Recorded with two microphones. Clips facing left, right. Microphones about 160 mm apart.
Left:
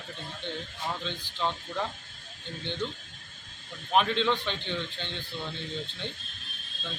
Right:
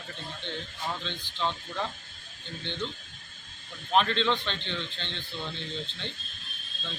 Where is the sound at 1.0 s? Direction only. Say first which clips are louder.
Left 1 dB; 10° left (ahead or behind).